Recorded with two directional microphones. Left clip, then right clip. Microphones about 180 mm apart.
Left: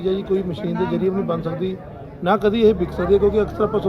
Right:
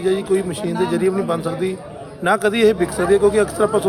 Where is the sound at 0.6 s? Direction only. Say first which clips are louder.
Right 3 dB; 40° right (ahead or behind).